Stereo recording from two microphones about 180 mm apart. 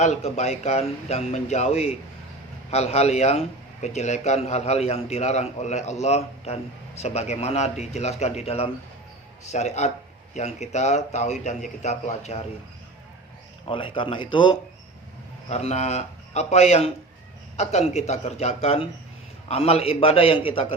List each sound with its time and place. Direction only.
0.0 s a man's voice: 40° left (ahead or behind)
13.7 s speech: 30° left (ahead or behind)
15.4 s a man's voice: 35° left (ahead or behind)